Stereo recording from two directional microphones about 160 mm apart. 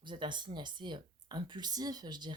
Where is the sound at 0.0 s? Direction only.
30° right (ahead or behind).